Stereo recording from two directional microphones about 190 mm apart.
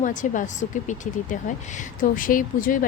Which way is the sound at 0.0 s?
40° left (ahead or behind).